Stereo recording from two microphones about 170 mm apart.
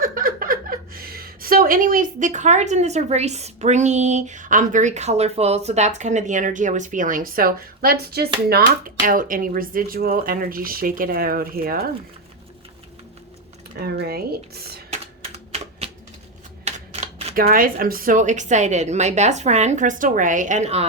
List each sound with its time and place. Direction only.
0.0 s a woman's voice: 55° right (ahead or behind)
13.8 s speech: 70° right (ahead or behind)
15.2 s typewriter: 35° right (ahead or behind)
16.6 s shuffling cards: 40° right (ahead or behind)
17.3 s a woman's voice: 55° right (ahead or behind); by 20.8 s 40° right (ahead or behind)